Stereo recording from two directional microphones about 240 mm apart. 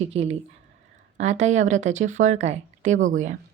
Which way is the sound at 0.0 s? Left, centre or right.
Right.